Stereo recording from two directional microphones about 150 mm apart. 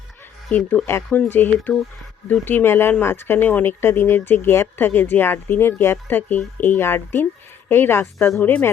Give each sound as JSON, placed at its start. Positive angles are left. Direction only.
{"t": 0.5, "sound": "speech", "side_deg": 10}